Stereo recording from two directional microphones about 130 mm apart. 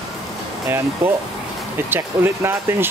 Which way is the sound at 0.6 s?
20° right (ahead or behind).